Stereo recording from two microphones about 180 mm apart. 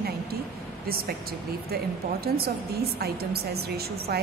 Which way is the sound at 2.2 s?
60° right (ahead or behind).